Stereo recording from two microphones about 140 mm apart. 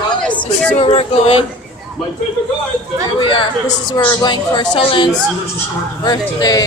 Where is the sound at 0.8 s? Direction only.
45° left (ahead or behind).